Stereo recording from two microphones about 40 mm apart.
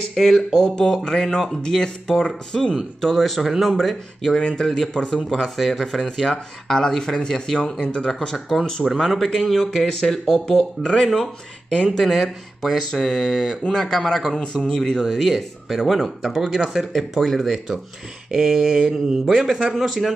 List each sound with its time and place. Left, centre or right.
0.1 s speech: centre
0.6 s speech: centre
4.3 s speech: left
5.3 s speech: centre; by 8.1 s left
8.5 s speech: centre